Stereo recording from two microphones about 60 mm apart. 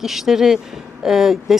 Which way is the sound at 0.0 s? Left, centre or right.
Centre.